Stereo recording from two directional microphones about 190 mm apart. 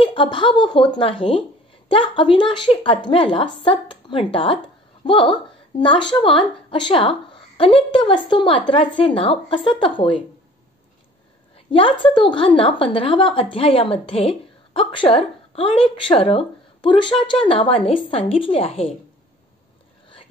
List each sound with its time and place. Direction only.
0.0 s a woman's voice: 25° left (ahead or behind)
11.7 s a woman's voice: 25° left (ahead or behind)